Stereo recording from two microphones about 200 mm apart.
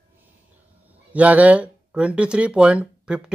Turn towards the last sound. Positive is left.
turn(degrees=-5)  # may be behind; listen again after turning